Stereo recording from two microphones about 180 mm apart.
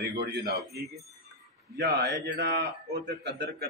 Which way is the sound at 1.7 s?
65° right (ahead or behind).